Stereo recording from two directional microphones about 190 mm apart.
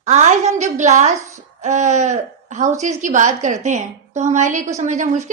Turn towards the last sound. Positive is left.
turn(degrees=-40)  # may be behind; listen again after turning